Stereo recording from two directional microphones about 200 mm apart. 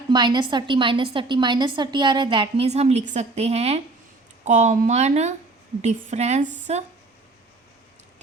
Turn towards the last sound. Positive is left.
turn(degrees=-35)  # may be behind; listen again after turning